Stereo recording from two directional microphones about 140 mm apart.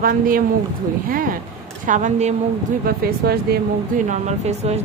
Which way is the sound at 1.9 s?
60° right (ahead or behind).